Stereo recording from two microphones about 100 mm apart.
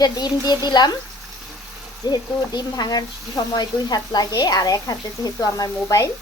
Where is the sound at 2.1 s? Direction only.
45° left (ahead or behind).